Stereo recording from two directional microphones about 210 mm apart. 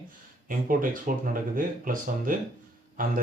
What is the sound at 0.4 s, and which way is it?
Speech, 40° right (ahead or behind).